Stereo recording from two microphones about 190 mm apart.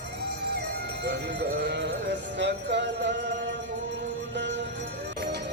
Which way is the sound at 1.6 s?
65° right (ahead or behind).